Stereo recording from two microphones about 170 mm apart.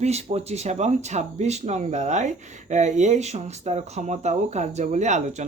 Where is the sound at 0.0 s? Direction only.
40° right (ahead or behind).